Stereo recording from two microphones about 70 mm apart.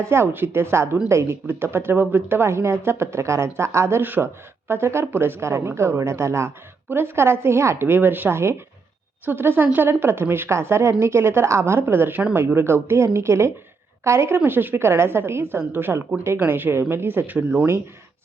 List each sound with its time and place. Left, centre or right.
0.0 s a woman's voice: right